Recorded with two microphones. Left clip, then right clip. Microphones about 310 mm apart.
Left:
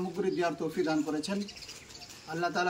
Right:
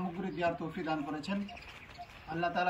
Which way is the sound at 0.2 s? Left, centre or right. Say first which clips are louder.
Left 4 dB; centre.